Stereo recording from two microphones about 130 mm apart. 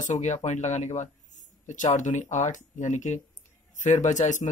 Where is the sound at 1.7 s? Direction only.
70° left (ahead or behind).